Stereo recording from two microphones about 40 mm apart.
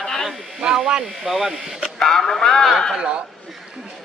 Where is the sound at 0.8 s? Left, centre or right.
Centre.